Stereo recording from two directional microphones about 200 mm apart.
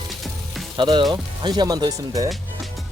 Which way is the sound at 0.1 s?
Centre (ahead or behind).